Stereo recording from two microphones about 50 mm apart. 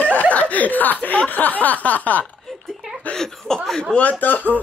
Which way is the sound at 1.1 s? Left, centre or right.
Left.